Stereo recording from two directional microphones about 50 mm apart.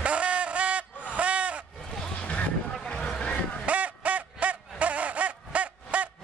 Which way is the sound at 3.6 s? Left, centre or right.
Right.